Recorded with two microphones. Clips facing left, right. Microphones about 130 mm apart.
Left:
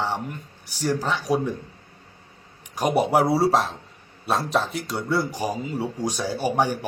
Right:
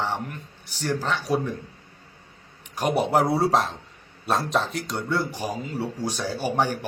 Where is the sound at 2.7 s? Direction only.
10° left (ahead or behind).